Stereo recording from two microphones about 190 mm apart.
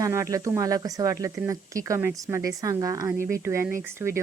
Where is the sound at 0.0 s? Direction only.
15° right (ahead or behind).